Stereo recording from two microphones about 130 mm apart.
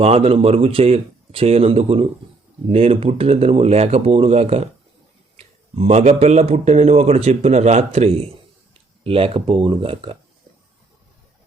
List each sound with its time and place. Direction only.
0.0 s speech: 50° right (ahead or behind)